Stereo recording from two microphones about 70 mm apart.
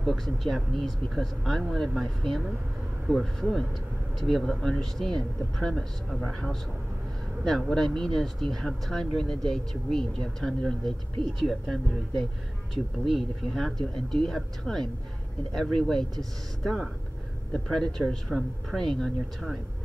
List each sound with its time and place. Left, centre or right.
0.0 s speech: centre
7.7 s speech: centre